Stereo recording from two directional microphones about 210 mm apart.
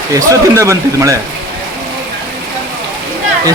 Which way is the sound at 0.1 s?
15° right (ahead or behind).